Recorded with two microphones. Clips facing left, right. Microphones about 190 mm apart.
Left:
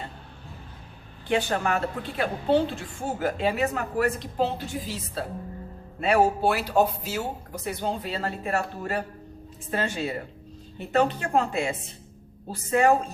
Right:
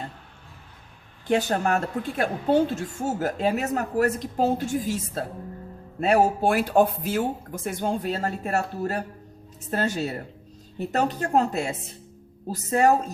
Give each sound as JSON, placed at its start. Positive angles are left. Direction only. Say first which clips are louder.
{"t": 1.3, "sound": "a woman's voice", "louder": "right 2 dB", "side_deg": -40}